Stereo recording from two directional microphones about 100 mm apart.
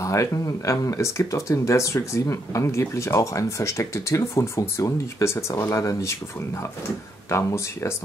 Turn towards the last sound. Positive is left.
turn(degrees=30)  # may be behind; listen again after turning